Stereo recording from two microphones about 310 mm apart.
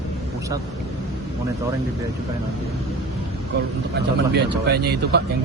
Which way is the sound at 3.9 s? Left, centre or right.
Right.